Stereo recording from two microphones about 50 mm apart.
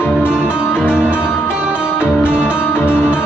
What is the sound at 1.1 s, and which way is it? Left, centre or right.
Music, left.